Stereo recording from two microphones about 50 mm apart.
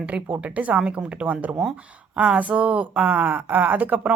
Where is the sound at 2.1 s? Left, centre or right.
Centre.